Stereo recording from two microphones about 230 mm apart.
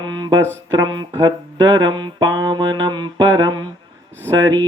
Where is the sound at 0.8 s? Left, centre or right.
Centre.